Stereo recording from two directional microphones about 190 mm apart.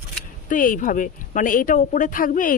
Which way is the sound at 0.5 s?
45° left (ahead or behind).